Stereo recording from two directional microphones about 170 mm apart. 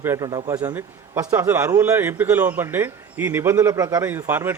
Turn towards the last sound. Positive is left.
turn(degrees=-15)  # may be behind; listen again after turning